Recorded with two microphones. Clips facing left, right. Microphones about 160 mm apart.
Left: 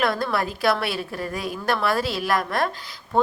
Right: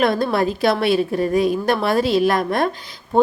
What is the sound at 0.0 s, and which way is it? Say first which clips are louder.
Speech: right 6 dB; 20° right (ahead or behind).